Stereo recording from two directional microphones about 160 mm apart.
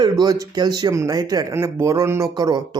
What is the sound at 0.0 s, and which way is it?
Speech, 25° right (ahead or behind).